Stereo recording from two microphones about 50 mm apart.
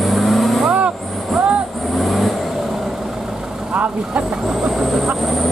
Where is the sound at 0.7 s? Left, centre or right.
Right.